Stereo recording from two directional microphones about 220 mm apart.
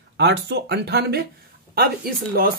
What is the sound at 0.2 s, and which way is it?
Speech, 50° right (ahead or behind).